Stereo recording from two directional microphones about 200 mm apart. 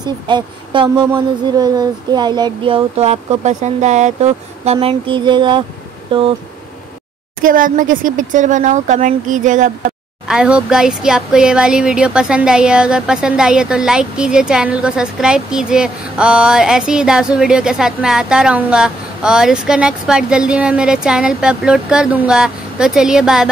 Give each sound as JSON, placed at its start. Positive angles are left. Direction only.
{"t": 0.0, "sound": "a sound", "side_deg": -25}
{"t": 7.4, "sound": "speech", "side_deg": -40}
{"t": 10.2, "sound": "speech", "side_deg": -5}